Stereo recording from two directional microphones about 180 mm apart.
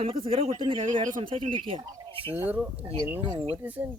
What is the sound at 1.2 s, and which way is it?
Speech, 30° right (ahead or behind).